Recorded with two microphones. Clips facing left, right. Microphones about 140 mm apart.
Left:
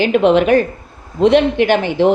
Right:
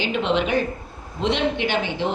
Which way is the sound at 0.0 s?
50° left (ahead or behind).